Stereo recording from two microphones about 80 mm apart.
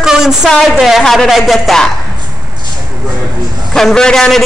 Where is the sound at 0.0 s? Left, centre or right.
Centre.